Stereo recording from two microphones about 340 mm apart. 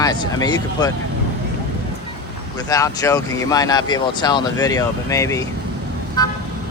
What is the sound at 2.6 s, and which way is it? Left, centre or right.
Speech, centre.